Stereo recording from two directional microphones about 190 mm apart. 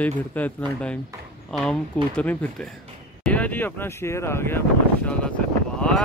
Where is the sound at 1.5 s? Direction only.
5° left (ahead or behind).